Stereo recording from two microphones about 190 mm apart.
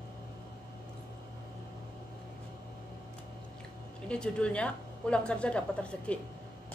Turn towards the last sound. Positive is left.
turn(degrees=5)  # may be behind; listen again after turning